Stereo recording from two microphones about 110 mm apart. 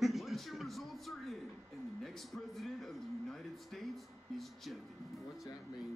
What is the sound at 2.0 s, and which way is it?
Speech, centre (ahead or behind).